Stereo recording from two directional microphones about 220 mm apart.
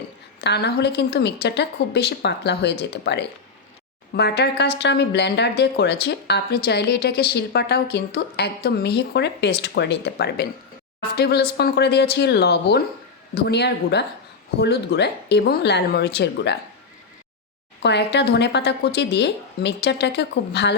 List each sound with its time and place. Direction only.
0.4 s a woman's voice: 50° left (ahead or behind)
17.8 s a woman's voice: 50° left (ahead or behind)